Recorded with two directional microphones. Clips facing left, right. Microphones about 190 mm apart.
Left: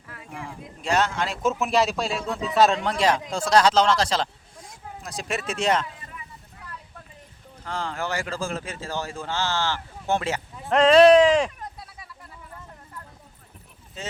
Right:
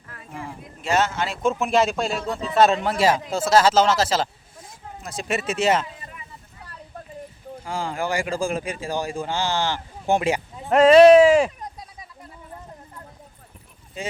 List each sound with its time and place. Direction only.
0.3 s a man's voice: centre (ahead or behind)
7.6 s speech: 10° right (ahead or behind)
11.8 s a sound: 20° right (ahead or behind)
14.0 s speech: 10° right (ahead or behind)